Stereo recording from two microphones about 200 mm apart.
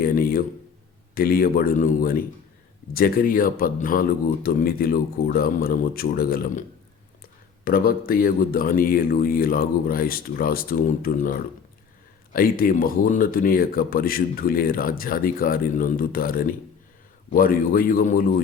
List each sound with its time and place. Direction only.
0.0 s speech: 45° left (ahead or behind)